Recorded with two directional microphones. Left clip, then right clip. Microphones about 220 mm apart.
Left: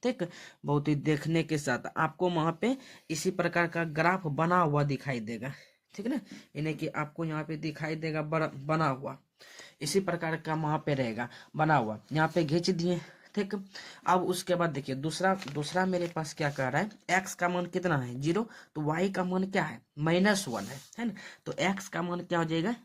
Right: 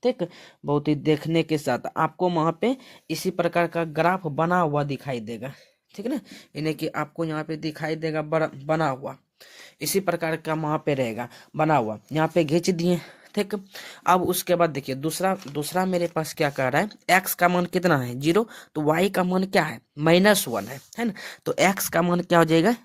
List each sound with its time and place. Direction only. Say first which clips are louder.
0.0 s speech: right 8 dB; 20° right (ahead or behind); by 22.8 s 50° right (ahead or behind)